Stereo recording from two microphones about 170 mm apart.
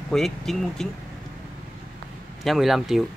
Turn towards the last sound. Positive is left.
turn(degrees=0)  # may be behind; listen again after turning